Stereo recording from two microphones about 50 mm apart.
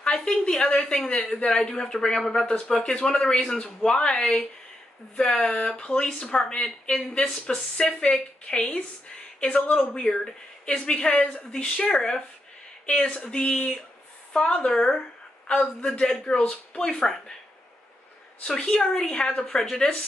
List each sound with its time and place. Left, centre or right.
0.0 s speech: centre
2.4 s speech: left
10.0 s speech: centre
14.3 s speech: centre
15.9 s a man's voice: centre
18.4 s speech: centre